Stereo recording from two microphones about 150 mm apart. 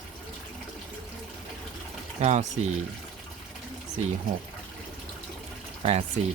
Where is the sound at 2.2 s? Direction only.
50° right (ahead or behind).